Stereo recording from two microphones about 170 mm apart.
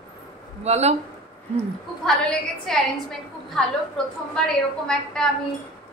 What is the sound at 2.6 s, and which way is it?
A woman's voice, centre (ahead or behind).